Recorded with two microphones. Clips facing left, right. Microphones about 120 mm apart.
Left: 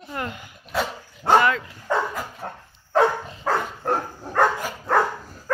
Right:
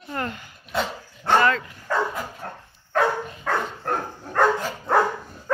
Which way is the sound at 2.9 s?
30° left (ahead or behind).